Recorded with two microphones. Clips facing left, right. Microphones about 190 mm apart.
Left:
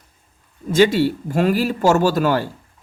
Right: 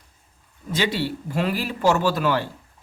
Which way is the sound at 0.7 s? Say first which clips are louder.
Left 9 dB; 45° left (ahead or behind).